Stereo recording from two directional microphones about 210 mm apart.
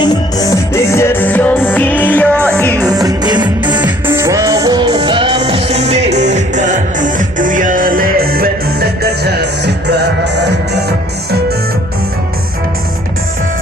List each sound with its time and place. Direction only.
0.0 s music: 20° left (ahead or behind)
2.8 s music: 15° right (ahead or behind)
3.8 s music: 10° right (ahead or behind); by 11.3 s 50° right (ahead or behind)